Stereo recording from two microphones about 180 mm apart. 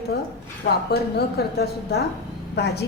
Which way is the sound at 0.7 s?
60° left (ahead or behind).